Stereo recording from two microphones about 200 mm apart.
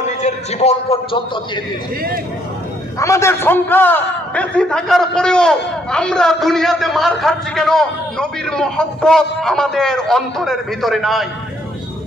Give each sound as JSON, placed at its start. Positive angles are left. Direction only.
{"t": 0.2, "sound": "a man's voice", "side_deg": 35}
{"t": 3.0, "sound": "a man's voice", "side_deg": 15}